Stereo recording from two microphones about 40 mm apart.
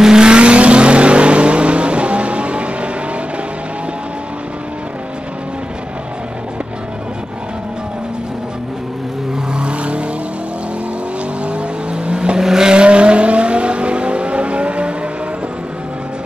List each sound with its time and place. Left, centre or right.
0.0 s vehicle: centre
9.5 s vehicle: right
11.4 s vehicle: right
12.4 s vehicle: centre